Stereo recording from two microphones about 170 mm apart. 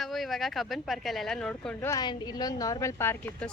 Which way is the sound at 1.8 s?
20° left (ahead or behind).